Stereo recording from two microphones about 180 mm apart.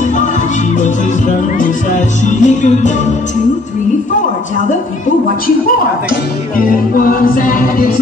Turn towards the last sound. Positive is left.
turn(degrees=50)  # may be behind; listen again after turning